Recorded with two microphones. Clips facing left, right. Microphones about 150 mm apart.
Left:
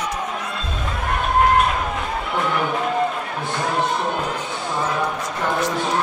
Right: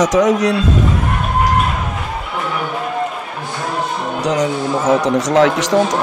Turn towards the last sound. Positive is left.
turn(degrees=-90)